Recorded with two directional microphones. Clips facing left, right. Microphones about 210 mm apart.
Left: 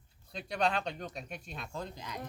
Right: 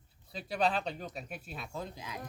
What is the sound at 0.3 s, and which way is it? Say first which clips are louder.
Speech: right 1 dB; 5° right (ahead or behind).